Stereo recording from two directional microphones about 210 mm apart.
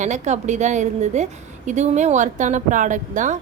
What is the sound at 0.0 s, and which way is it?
A woman's voice, 35° right (ahead or behind).